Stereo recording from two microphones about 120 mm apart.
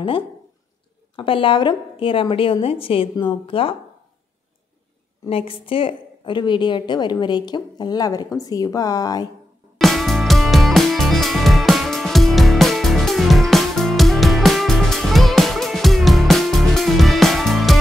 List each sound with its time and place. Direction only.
1.1 s a woman's voice: 45° left (ahead or behind)
5.3 s a woman's voice: 50° left (ahead or behind); by 9.3 s 30° left (ahead or behind)
9.8 s music: centre (ahead or behind)